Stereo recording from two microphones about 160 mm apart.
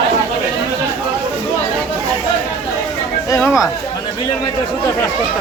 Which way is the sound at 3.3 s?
20° left (ahead or behind).